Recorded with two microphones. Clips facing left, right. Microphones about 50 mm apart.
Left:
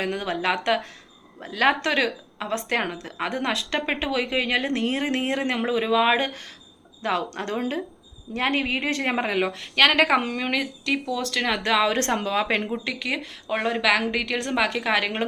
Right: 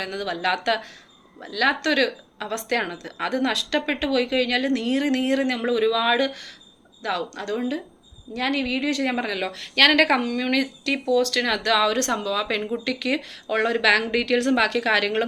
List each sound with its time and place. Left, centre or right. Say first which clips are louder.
0.0 s a woman's voice: even; left
1.8 s a woman's voice: right 2 dB; left
9.6 s a woman's voice: right 2 dB; centre
10.2 s a woman's voice: right 1 dB; left
10.5 s speech: right 2 dB; centre; by 12.6 s left
12.7 s a woman's voice: right 3 dB; centre